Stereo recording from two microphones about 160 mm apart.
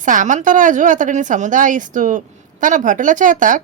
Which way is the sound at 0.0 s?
55° right (ahead or behind).